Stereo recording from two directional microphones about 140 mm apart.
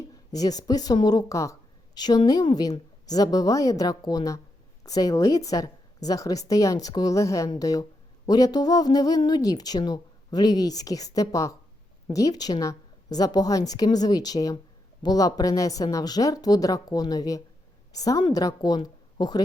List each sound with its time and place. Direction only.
0.3 s a woman's voice: 25° left (ahead or behind)